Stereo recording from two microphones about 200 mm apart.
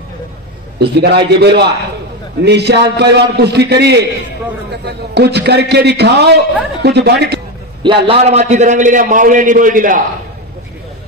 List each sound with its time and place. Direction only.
0.7 s a man's voice: 55° right (ahead or behind)
7.8 s a man's voice: 25° right (ahead or behind); by 10.0 s 45° right (ahead or behind)